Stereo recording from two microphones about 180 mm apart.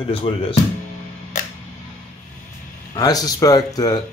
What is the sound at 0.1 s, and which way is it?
Speech, 30° left (ahead or behind).